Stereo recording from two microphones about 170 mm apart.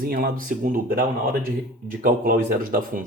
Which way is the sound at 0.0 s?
60° right (ahead or behind).